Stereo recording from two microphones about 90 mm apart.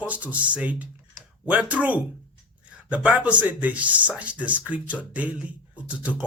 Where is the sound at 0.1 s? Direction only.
15° right (ahead or behind).